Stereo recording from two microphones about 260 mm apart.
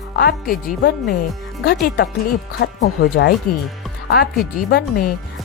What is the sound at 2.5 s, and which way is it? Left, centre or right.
Speech, left.